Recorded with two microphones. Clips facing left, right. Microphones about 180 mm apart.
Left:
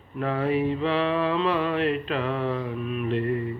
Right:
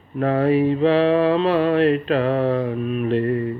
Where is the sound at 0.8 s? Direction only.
35° right (ahead or behind).